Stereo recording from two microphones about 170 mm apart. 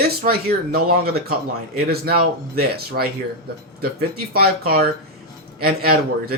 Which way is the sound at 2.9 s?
65° right (ahead or behind).